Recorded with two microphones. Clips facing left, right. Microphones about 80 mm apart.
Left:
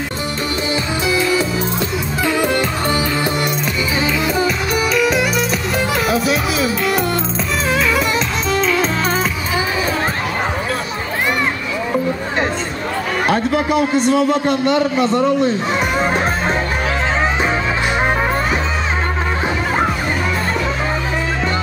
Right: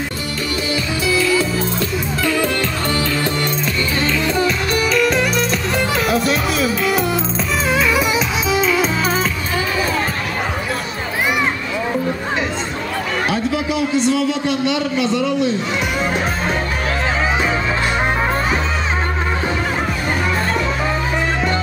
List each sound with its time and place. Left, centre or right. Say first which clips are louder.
1.0 s music: right 1 dB; left
4.0 s music: even; centre
8.5 s music: even; centre
13.3 s a man's voice: left 6 dB; left
16.0 s music: left 3 dB; left